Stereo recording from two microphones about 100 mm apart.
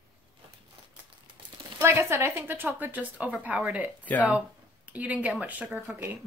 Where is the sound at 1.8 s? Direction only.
25° right (ahead or behind).